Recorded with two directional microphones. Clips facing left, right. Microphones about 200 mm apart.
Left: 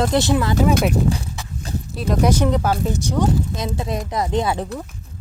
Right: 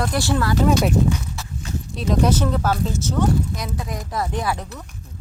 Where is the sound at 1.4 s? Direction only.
15° left (ahead or behind).